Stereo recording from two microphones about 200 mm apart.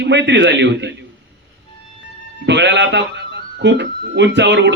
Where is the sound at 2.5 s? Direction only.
60° right (ahead or behind).